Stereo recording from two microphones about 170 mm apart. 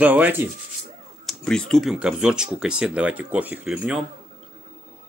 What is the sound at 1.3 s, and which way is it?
Speech, 5° left (ahead or behind).